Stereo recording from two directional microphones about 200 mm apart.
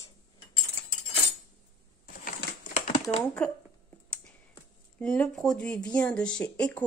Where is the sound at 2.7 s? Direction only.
35° left (ahead or behind).